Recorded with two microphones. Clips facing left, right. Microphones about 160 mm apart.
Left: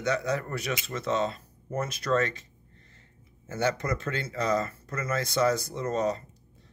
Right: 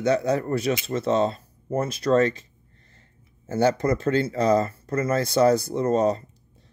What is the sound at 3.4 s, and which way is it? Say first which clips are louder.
Speech: right 7 dB; 35° right (ahead or behind).